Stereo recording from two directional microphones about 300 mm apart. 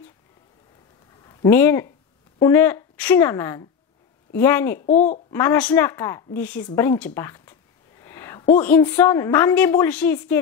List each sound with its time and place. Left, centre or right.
1.2 s a woman's voice: centre
4.8 s speech: left
5.3 s a woman's voice: centre
8.0 s a sound: centre
8.5 s a woman's voice: centre